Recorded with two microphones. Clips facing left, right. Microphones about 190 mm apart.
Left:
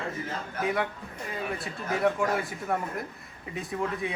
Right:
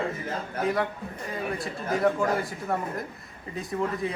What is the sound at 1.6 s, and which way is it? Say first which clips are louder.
Speech: right 2 dB; centre (ahead or behind).